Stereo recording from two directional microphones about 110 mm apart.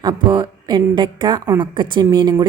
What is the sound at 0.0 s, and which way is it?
A woman's voice, 40° right (ahead or behind).